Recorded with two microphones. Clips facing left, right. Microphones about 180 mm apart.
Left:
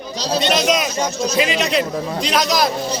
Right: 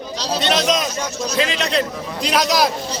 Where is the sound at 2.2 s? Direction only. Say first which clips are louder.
Right 2 dB; 5° right (ahead or behind).